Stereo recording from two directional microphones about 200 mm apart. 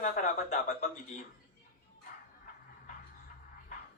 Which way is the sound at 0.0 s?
40° left (ahead or behind).